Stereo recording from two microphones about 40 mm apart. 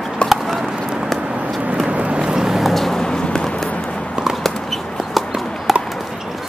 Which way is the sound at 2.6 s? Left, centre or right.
Centre.